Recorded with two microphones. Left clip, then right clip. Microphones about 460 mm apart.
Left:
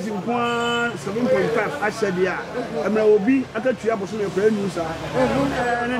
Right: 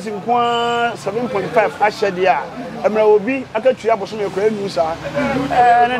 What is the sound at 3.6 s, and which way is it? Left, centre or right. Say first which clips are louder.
A man's voice: right 7 dB; right.